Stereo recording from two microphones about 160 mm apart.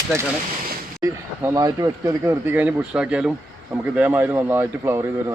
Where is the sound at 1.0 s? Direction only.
20° right (ahead or behind).